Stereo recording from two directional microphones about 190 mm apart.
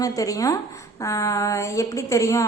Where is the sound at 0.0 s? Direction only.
20° left (ahead or behind).